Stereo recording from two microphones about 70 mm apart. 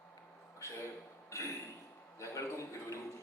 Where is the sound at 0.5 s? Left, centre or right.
Left.